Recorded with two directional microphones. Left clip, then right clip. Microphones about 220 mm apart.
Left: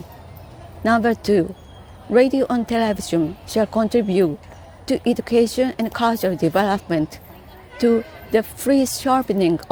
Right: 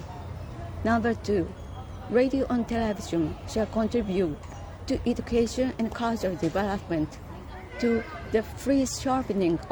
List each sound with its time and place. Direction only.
0.9 s speech: 35° left (ahead or behind)